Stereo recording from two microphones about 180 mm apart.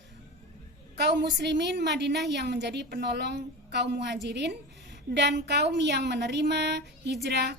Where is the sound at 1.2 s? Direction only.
70° right (ahead or behind).